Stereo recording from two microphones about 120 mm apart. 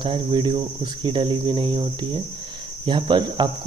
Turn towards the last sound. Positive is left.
turn(degrees=-40)  # may be behind; listen again after turning